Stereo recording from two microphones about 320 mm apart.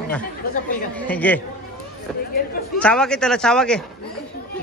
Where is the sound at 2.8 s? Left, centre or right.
Centre.